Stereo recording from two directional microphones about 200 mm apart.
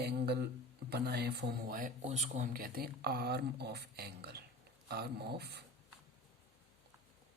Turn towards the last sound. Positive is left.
turn(degrees=-55)  # may be behind; listen again after turning